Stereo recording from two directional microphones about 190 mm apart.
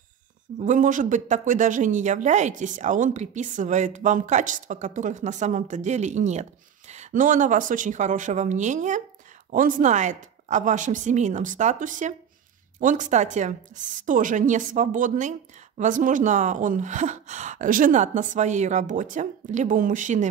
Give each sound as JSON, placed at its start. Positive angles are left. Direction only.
{"t": 0.6, "sound": "speech", "side_deg": -40}